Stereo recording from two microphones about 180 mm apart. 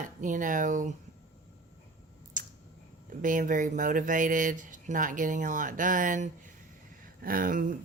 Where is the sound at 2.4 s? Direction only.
45° right (ahead or behind).